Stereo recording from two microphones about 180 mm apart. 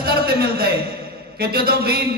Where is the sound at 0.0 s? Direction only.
60° right (ahead or behind).